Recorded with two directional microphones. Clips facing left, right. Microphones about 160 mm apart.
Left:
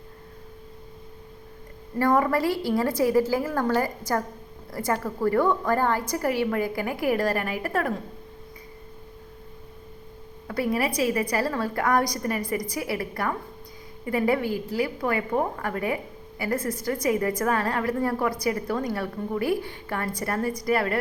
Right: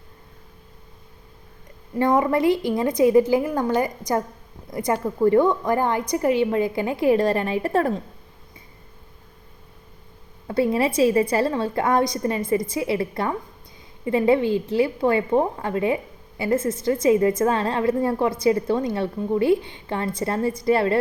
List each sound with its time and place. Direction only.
2.0 s a woman's voice: 20° right (ahead or behind)
10.4 s a woman's voice: 25° right (ahead or behind)